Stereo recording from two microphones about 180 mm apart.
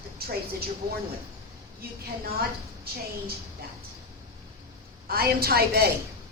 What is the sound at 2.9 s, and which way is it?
Speech, 60° right (ahead or behind).